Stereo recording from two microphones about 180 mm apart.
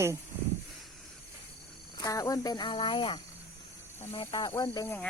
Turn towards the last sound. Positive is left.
turn(degrees=15)  # may be behind; listen again after turning